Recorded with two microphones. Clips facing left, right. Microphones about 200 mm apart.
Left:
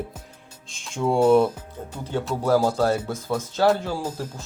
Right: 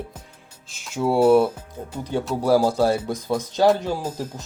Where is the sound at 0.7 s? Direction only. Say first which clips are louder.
Right 1 dB; 5° right (ahead or behind).